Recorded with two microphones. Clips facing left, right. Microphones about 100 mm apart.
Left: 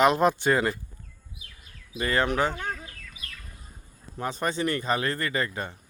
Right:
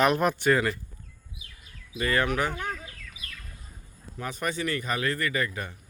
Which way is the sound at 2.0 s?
25° left (ahead or behind).